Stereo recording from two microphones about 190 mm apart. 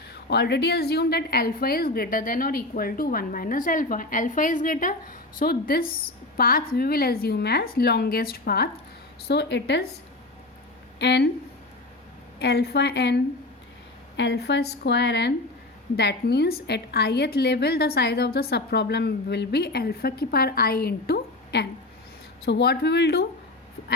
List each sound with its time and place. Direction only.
0.1 s a woman's voice: 60° left (ahead or behind)
11.0 s a woman's voice: 65° left (ahead or behind)
12.4 s a woman's voice: 60° left (ahead or behind)